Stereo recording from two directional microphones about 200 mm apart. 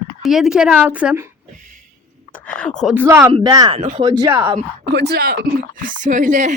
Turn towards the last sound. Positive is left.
turn(degrees=-40)  # may be behind; listen again after turning